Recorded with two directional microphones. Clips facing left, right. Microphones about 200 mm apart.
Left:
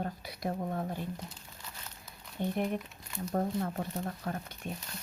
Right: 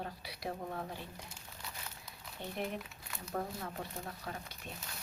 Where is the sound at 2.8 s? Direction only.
Centre (ahead or behind).